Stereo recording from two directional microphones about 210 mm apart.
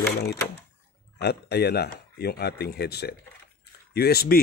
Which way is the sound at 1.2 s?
50° left (ahead or behind).